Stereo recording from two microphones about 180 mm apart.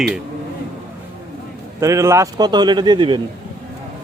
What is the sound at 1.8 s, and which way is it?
A man's voice, 15° right (ahead or behind).